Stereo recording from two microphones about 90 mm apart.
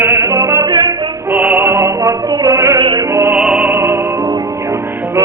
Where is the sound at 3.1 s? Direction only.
25° right (ahead or behind).